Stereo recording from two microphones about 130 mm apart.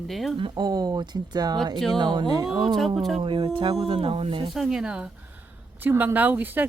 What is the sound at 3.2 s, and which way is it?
Speech, 40° right (ahead or behind).